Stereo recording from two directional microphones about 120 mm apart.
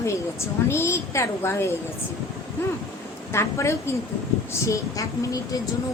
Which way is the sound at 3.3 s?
25° left (ahead or behind).